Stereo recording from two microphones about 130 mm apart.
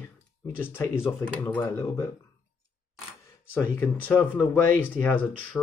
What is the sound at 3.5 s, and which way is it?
Speech, 15° left (ahead or behind).